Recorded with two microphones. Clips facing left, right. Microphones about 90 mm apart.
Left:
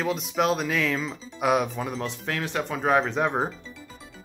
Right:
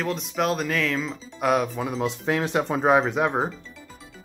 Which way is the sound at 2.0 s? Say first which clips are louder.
Right 6 dB; 20° right (ahead or behind).